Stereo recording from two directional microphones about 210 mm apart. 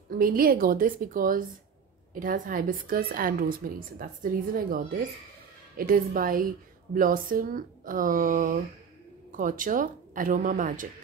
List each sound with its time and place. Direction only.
0.2 s a woman's voice: 45° right (ahead or behind)